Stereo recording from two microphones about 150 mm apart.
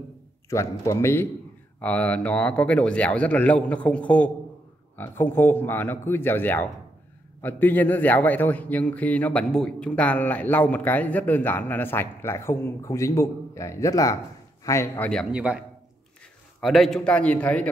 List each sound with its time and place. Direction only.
0.5 s a man's voice: 20° left (ahead or behind)
15.3 s a man's voice: 10° right (ahead or behind)
16.6 s a man's voice: centre (ahead or behind)